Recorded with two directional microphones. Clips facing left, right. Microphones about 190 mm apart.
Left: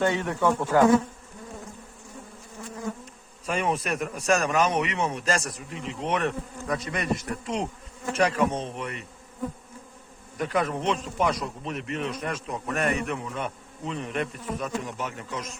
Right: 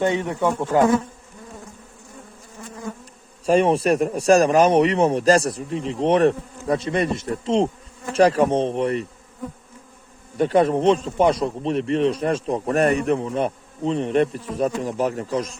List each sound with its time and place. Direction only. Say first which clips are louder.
0.0 s speech: right 3 dB; 20° right (ahead or behind)
3.4 s speech: right 10 dB; 35° right (ahead or behind)
10.3 s speech: right 9 dB; 30° right (ahead or behind)